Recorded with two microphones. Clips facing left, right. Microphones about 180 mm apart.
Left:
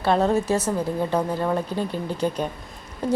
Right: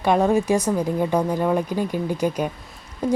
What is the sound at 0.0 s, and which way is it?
A woman's voice, 10° right (ahead or behind).